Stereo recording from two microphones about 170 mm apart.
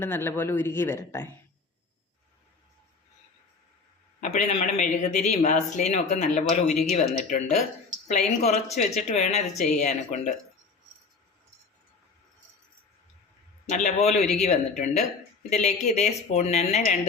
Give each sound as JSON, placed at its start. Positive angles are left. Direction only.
{"t": 0.0, "sound": "speech", "side_deg": 15}
{"t": 4.2, "sound": "a man's voice", "side_deg": 40}
{"t": 13.7, "sound": "a man's voice", "side_deg": 45}